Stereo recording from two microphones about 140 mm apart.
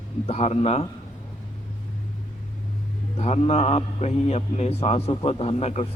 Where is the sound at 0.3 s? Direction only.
50° left (ahead or behind).